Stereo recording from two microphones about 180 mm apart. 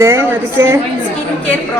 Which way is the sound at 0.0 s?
15° right (ahead or behind).